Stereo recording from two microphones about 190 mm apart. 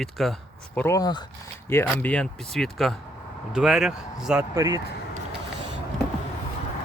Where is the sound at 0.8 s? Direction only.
15° left (ahead or behind).